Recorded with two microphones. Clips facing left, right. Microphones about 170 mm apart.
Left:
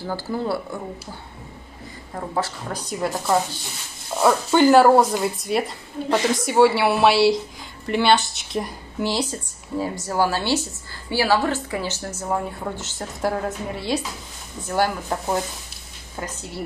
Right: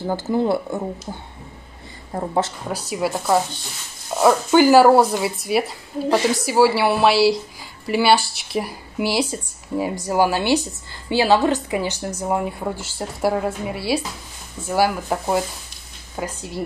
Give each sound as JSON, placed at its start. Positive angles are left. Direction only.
{"t": 0.0, "sound": "speech", "side_deg": -20}
{"t": 2.1, "sound": "speech", "side_deg": -25}
{"t": 2.7, "sound": "a woman's voice", "side_deg": -5}